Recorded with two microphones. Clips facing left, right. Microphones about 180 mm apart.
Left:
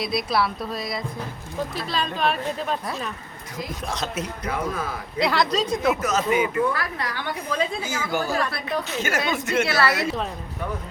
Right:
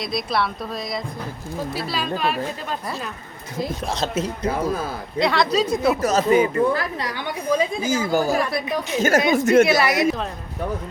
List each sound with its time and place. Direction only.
0.0 s speech: centre (ahead or behind)
3.6 s speech: 30° right (ahead or behind)
5.2 s speech: centre (ahead or behind)
5.8 s speech: 35° right (ahead or behind)
6.7 s a woman's voice: 20° right (ahead or behind)
9.0 s a woman's voice: 40° right (ahead or behind)
9.6 s a woman's voice: 15° right (ahead or behind)